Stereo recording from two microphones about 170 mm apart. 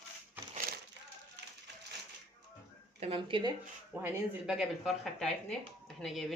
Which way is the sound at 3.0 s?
30° right (ahead or behind).